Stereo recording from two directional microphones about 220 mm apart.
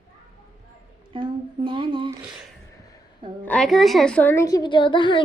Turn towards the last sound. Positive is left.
turn(degrees=20)  # may be behind; listen again after turning